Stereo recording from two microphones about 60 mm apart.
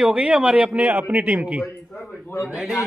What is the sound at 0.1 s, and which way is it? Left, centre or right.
Speech, centre.